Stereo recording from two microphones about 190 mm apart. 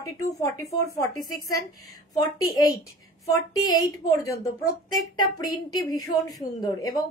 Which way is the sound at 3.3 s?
20° left (ahead or behind).